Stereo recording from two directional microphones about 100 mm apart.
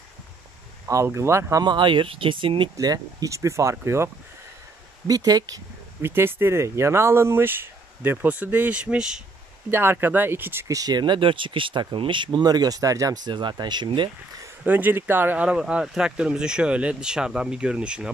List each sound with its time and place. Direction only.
0.8 s speech: 30° right (ahead or behind)
1.6 s speech: 50° right (ahead or behind)
2.8 s speech: 40° right (ahead or behind)
5.0 s speech: 40° right (ahead or behind)
6.0 s speech: 25° right (ahead or behind)
9.7 s speech: 20° right (ahead or behind)
10.7 s speech: 40° right (ahead or behind)
14.6 s speech: 20° right (ahead or behind)